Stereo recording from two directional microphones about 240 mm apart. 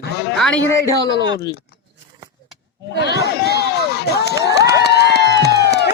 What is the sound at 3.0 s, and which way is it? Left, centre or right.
Speech, left.